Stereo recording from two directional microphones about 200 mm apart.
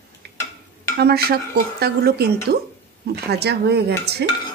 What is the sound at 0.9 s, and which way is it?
Speech, 50° right (ahead or behind).